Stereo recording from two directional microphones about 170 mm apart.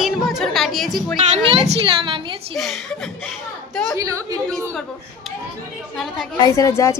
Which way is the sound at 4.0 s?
20° right (ahead or behind).